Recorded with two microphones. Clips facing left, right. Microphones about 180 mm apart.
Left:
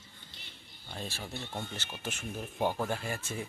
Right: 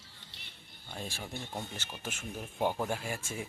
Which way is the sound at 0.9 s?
10° right (ahead or behind).